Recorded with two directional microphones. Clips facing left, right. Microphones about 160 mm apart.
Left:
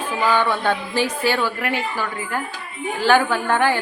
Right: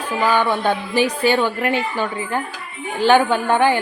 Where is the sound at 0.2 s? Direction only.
15° right (ahead or behind).